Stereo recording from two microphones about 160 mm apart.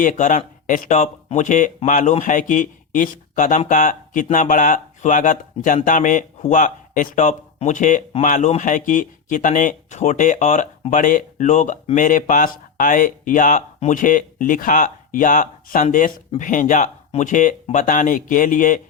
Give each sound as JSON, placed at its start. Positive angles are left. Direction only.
{"t": 0.0, "sound": "speech", "side_deg": 50}